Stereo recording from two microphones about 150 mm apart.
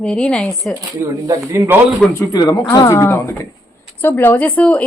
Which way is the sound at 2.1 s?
25° left (ahead or behind).